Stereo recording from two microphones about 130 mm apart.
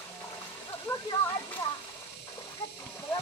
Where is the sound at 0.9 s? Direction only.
15° left (ahead or behind).